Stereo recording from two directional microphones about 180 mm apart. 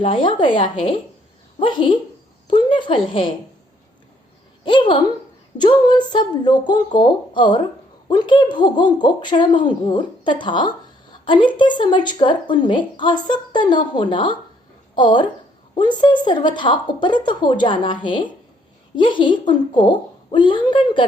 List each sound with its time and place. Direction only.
0.0 s a woman's voice: 30° left (ahead or behind)
4.6 s speech: 25° left (ahead or behind)